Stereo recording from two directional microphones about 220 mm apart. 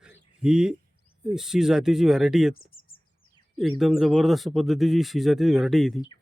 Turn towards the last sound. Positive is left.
turn(degrees=0)  # may be behind; listen again after turning